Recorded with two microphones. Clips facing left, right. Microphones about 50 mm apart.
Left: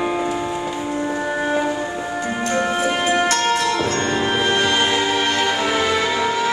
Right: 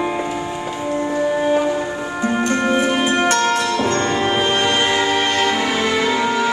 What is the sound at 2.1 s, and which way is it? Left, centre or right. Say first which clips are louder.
Music: right 5 dB; centre.